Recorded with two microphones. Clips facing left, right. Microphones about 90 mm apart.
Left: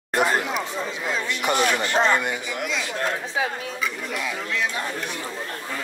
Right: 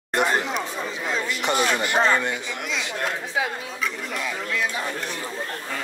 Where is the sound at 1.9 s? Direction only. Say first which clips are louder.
Even; 20° left (ahead or behind).